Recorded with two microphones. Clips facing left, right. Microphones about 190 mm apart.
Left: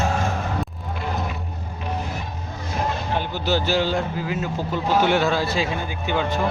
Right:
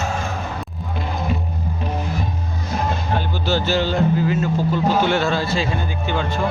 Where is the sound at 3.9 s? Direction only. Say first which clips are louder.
Right 6 dB; centre (ahead or behind).